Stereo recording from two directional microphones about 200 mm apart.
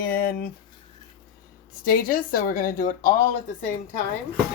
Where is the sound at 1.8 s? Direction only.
45° left (ahead or behind).